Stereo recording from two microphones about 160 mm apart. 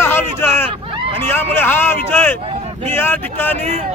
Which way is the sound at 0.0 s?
15° left (ahead or behind).